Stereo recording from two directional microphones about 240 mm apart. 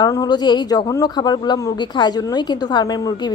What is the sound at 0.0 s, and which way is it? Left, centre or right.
Speech, centre.